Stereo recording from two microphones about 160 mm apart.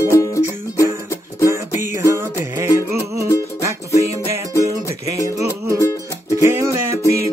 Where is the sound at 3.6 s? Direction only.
20° right (ahead or behind).